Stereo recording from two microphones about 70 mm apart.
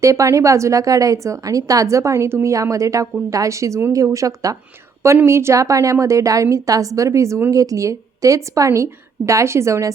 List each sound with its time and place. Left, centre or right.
0.0 s speech: right
5.2 s speech: right